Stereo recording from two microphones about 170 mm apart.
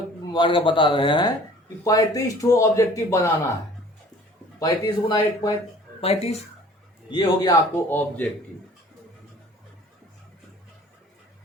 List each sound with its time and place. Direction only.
0.2 s speech: 30° left (ahead or behind)
4.6 s speech: 25° left (ahead or behind)
6.0 s speech: 35° left (ahead or behind)
7.1 s speech: 25° left (ahead or behind)